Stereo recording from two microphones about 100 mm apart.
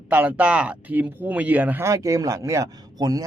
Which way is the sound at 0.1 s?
15° right (ahead or behind).